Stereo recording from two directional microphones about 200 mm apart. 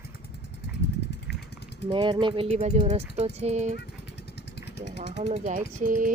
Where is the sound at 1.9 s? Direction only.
25° right (ahead or behind).